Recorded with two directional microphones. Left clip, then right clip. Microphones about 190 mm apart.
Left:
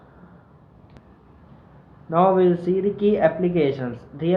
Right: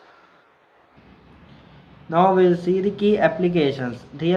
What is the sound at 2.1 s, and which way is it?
Speech, 15° right (ahead or behind).